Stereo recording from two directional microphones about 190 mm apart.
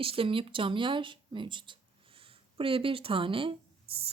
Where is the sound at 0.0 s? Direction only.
30° right (ahead or behind).